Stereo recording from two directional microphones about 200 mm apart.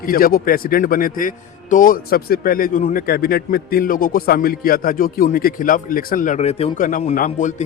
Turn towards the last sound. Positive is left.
turn(degrees=40)  # may be behind; listen again after turning